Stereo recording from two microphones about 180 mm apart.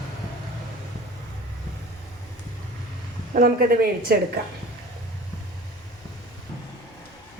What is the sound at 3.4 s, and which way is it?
Speech, 55° right (ahead or behind).